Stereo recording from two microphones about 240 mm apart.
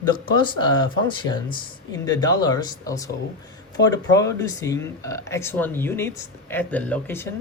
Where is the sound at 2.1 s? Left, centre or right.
Centre.